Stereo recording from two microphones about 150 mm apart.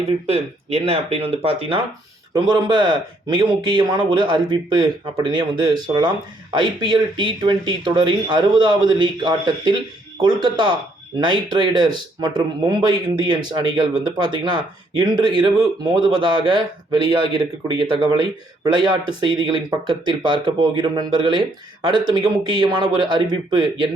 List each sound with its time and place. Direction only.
0.3 s speech: 40° right (ahead or behind)
2.3 s speech: 30° right (ahead or behind)